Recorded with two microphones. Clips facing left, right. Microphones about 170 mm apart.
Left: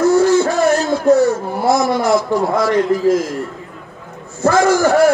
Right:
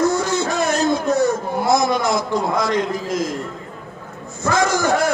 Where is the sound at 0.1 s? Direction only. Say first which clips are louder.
Left 8 dB; 15° right (ahead or behind).